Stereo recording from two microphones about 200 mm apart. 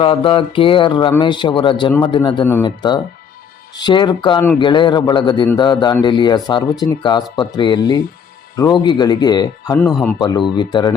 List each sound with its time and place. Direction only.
0.0 s speech: 25° left (ahead or behind)
9.7 s speech: 5° left (ahead or behind)
10.2 s speech: 20° left (ahead or behind)